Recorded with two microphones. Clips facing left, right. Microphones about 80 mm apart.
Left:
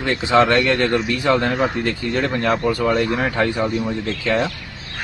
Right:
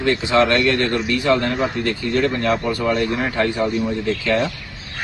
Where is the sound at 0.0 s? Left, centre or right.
Left.